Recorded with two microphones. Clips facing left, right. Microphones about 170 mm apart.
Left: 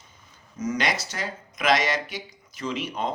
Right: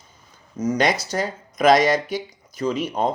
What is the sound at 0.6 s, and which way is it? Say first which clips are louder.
Speech: right 6 dB; 40° right (ahead or behind).